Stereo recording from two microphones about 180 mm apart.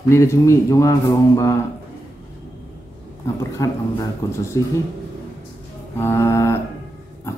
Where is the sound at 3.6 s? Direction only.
20° left (ahead or behind).